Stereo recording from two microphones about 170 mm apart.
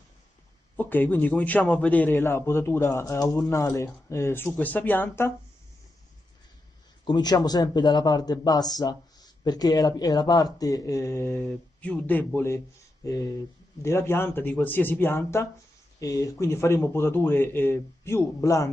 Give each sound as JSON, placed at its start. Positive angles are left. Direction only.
{"t": 0.7, "sound": "a man's voice", "side_deg": 10}
{"t": 7.1, "sound": "a man's voice", "side_deg": 25}